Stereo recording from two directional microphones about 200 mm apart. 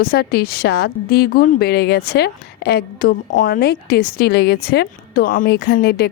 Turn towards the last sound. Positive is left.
turn(degrees=55)  # may be behind; listen again after turning